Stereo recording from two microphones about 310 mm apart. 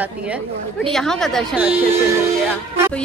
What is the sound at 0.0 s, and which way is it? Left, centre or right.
Speech, centre.